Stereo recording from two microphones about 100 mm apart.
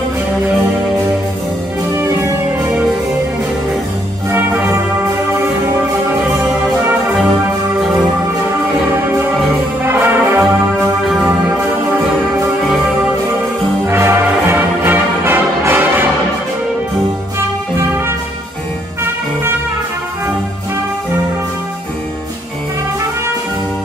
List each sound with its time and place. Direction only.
1.9 s music: 30° right (ahead or behind)
5.0 s music: 25° right (ahead or behind)
9.0 s music: 20° right (ahead or behind)
9.8 s brass instrument: 20° right (ahead or behind)
11.4 s music: 20° right (ahead or behind)
13.8 s music: 25° right (ahead or behind)
17.7 s music: 25° right (ahead or behind)